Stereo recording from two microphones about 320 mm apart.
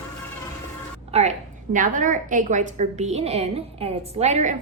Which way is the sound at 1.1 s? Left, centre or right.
Centre.